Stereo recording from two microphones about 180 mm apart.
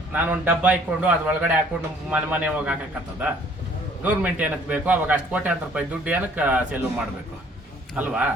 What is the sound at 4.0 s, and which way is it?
A man's voice, 10° right (ahead or behind).